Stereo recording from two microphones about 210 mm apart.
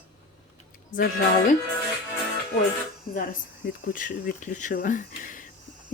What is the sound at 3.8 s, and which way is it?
A woman's voice, 40° left (ahead or behind).